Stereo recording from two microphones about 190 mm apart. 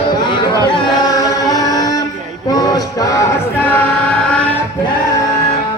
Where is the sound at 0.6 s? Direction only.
20° left (ahead or behind).